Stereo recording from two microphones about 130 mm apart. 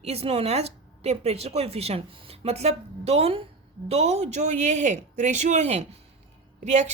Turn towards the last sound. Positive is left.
turn(degrees=-65)  # may be behind; listen again after turning